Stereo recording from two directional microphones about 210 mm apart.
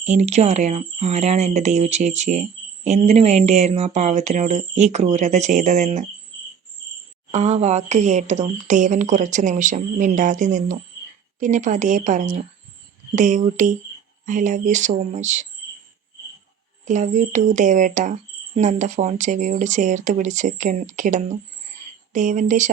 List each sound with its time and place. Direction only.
0.0 s speech: 35° right (ahead or behind)
7.3 s speech: 30° right (ahead or behind)
16.8 s speech: 35° right (ahead or behind)